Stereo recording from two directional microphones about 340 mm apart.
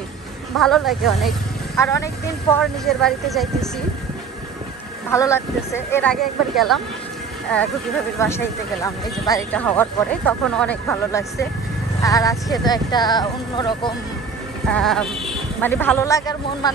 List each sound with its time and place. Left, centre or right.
0.6 s speech: centre
2.5 s speech: centre
5.1 s speech: centre
8.2 s speech: centre
14.7 s speech: centre